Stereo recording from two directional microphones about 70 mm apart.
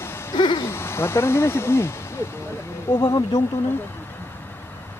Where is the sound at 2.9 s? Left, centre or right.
Left.